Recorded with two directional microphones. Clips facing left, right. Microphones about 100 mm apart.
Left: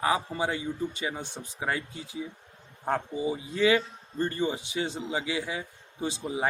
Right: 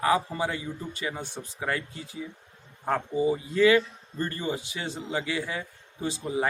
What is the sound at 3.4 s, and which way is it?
A man's voice, 20° left (ahead or behind).